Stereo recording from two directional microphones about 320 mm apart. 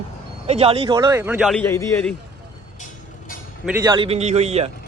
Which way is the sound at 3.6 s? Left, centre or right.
Centre.